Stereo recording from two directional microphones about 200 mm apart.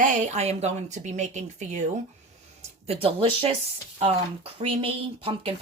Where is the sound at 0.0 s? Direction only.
40° right (ahead or behind).